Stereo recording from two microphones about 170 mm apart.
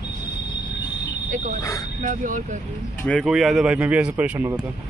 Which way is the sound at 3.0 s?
10° left (ahead or behind).